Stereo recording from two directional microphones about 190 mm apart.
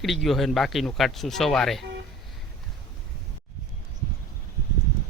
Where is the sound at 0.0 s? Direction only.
Centre (ahead or behind).